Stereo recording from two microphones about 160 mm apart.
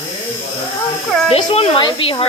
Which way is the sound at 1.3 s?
40° left (ahead or behind).